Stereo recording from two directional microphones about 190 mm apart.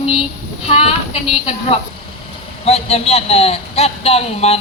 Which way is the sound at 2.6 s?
30° left (ahead or behind).